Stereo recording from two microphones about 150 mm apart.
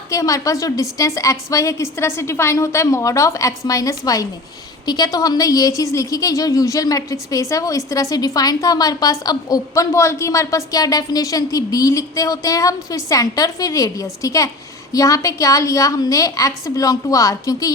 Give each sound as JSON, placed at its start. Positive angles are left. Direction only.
{"t": 0.1, "sound": "a woman's voice", "side_deg": 20}